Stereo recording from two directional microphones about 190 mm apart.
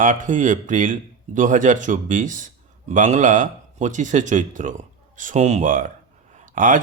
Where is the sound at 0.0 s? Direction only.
45° right (ahead or behind).